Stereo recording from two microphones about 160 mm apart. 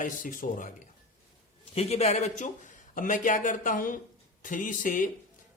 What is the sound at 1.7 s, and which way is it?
A man's voice, 40° left (ahead or behind).